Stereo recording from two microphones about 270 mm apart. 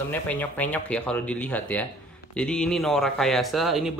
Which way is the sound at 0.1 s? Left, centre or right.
Centre.